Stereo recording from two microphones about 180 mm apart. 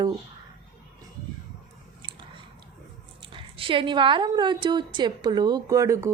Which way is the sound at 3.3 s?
30° right (ahead or behind).